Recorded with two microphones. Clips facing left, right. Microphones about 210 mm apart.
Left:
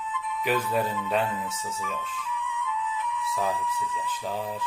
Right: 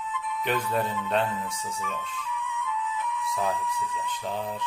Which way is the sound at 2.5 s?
45° right (ahead or behind).